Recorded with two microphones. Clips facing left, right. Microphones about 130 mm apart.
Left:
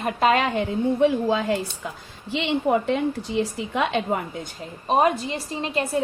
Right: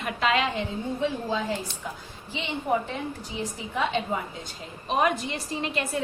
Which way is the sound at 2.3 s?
80° left.